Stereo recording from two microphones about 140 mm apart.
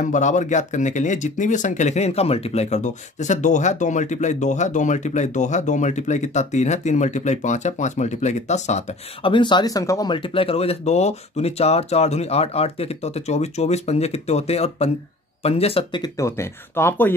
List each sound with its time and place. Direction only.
0.0 s speech: 60° left (ahead or behind)
9.2 s speech: 35° left (ahead or behind)
16.0 s speech: 20° left (ahead or behind)